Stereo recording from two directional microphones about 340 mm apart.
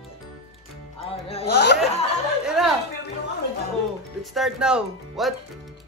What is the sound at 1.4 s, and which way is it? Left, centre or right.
Speech, left.